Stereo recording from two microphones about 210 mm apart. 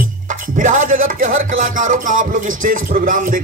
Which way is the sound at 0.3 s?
40° right (ahead or behind).